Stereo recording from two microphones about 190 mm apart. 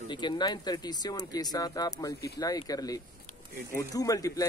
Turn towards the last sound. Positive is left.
turn(degrees=20)  # may be behind; listen again after turning